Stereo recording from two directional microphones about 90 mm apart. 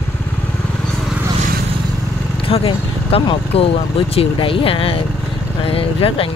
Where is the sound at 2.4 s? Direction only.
90° left.